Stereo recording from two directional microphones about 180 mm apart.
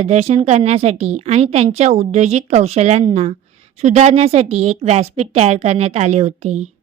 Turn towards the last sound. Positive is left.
turn(degrees=-40)  # may be behind; listen again after turning